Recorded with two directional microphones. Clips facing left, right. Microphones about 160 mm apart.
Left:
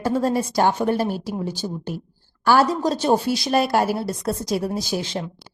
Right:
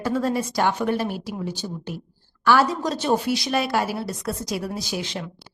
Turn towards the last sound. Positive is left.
turn(degrees=30)  # may be behind; listen again after turning